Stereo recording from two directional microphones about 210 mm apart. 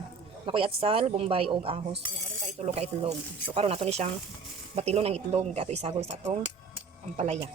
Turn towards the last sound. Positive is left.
turn(degrees=-30)  # may be behind; listen again after turning